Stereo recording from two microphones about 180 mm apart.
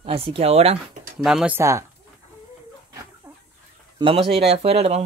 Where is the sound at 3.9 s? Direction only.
30° right (ahead or behind).